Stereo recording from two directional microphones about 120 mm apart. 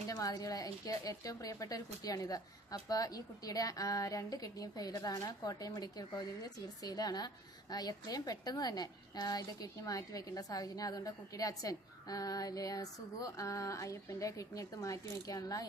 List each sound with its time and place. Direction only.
0.1 s a woman's voice: 30° left (ahead or behind)